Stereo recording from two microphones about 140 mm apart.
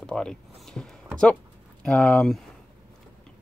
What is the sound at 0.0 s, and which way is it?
Speech, 5° left (ahead or behind).